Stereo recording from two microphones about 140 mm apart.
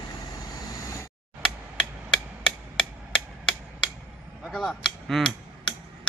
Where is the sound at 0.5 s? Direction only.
20° left (ahead or behind).